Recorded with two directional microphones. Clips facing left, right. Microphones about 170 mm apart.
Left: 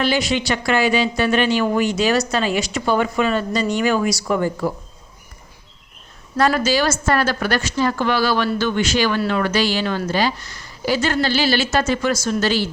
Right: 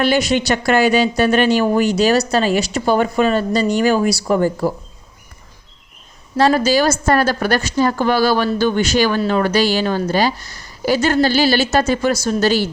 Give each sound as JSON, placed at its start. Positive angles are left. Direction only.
{"t": 0.0, "sound": "a woman's voice", "side_deg": -50}
{"t": 6.3, "sound": "a woman's voice", "side_deg": -35}